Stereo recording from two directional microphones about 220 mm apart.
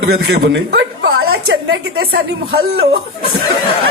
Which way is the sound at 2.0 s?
45° right (ahead or behind).